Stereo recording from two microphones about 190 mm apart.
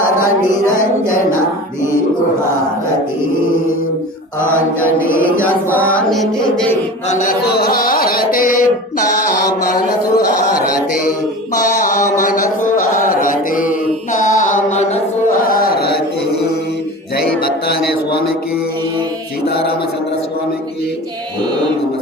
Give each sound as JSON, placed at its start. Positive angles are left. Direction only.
{"t": 4.4, "sound": "mantra", "side_deg": -10}
{"t": 5.7, "sound": "mantra", "side_deg": 5}
{"t": 7.1, "sound": "chant", "side_deg": 45}
{"t": 11.5, "sound": "a sound", "side_deg": 40}
{"t": 12.9, "sound": "mantra", "side_deg": 45}
{"t": 14.1, "sound": "music", "side_deg": 40}
{"t": 15.4, "sound": "a sound", "side_deg": 50}
{"t": 17.4, "sound": "music", "side_deg": 55}